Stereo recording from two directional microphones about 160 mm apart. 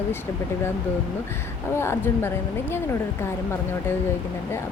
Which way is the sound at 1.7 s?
15° left (ahead or behind).